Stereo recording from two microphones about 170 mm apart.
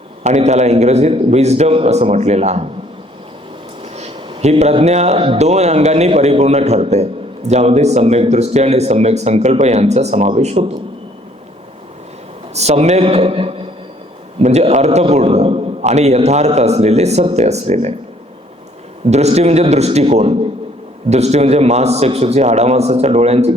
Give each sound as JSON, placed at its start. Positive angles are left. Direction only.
{"t": 0.2, "sound": "speech", "side_deg": -40}
{"t": 3.9, "sound": "speech", "side_deg": -35}
{"t": 12.5, "sound": "speech", "side_deg": -40}
{"t": 19.1, "sound": "speech", "side_deg": -40}